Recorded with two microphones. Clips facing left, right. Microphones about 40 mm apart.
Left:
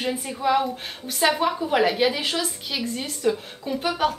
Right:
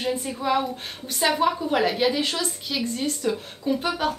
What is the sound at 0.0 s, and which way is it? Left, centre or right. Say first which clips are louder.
A woman's voice: left 1 dB; centre.